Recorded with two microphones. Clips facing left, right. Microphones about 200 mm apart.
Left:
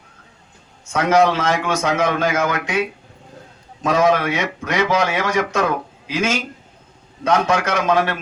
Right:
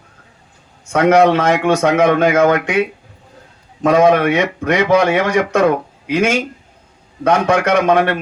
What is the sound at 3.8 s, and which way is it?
A man's voice, 60° right (ahead or behind).